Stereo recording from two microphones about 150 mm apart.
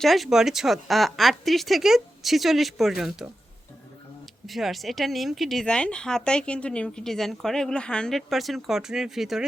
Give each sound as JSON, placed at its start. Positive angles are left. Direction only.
{"t": 0.0, "sound": "speech", "side_deg": 0}
{"t": 4.4, "sound": "speech", "side_deg": 0}